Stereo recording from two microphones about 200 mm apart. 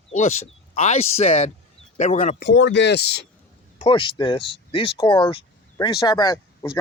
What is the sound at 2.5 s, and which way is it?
Speech, 65° left (ahead or behind).